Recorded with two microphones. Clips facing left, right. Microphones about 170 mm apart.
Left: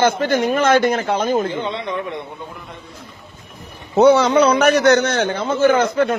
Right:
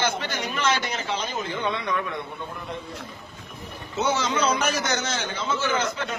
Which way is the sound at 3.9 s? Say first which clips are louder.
Left 13 dB; 60° left (ahead or behind).